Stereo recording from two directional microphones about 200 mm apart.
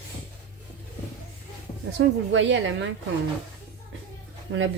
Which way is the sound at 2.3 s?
70° right (ahead or behind).